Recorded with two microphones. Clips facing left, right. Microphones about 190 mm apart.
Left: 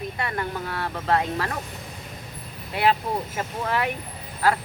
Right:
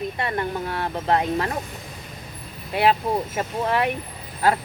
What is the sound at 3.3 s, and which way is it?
Speech, 25° right (ahead or behind).